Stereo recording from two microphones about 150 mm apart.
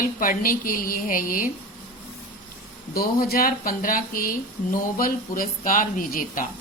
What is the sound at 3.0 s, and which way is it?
Speech, 75° left (ahead or behind).